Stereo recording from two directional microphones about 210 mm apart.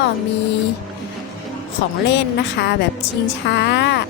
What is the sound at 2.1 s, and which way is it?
A woman's voice, 55° left (ahead or behind).